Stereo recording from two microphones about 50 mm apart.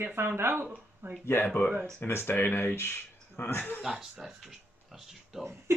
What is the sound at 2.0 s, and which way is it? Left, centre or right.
Speech, left.